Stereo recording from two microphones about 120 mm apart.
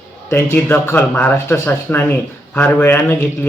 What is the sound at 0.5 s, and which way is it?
Speech, 15° left (ahead or behind).